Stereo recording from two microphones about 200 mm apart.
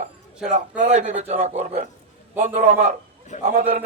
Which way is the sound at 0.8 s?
40° right (ahead or behind).